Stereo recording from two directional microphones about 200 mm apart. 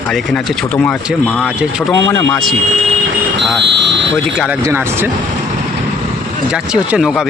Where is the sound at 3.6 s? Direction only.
60° right (ahead or behind).